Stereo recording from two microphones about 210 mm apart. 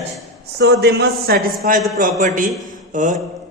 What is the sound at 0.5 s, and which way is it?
A man's voice, 50° right (ahead or behind).